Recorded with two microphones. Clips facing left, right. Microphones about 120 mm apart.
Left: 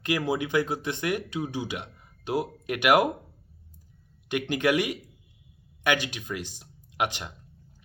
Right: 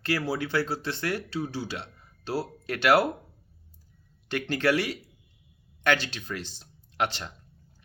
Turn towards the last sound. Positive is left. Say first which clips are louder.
# even
turn(degrees=15)  # may be behind; listen again after turning